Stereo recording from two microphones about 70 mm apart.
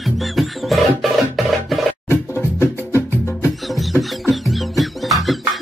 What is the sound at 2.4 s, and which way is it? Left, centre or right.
Music, left.